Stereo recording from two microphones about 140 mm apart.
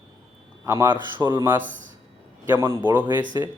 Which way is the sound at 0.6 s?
20° right (ahead or behind).